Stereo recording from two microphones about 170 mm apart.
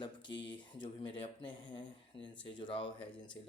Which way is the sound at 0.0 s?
30° left (ahead or behind).